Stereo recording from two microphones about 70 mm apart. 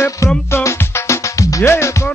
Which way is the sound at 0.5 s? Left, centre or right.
Left.